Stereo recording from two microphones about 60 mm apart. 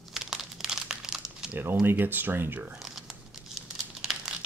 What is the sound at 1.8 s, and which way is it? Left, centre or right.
Speech, right.